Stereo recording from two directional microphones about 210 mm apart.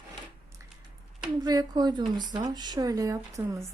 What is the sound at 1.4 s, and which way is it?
Speech, 20° right (ahead or behind).